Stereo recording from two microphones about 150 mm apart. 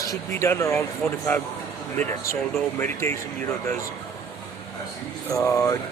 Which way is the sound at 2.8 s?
15° left (ahead or behind).